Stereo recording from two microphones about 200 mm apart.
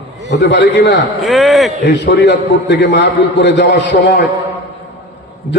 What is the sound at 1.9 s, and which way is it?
A man's voice, 60° left (ahead or behind).